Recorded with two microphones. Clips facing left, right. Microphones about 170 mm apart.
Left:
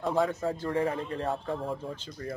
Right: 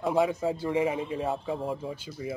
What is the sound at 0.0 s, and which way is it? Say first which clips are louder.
A man's voice: right 2 dB; 5° right (ahead or behind).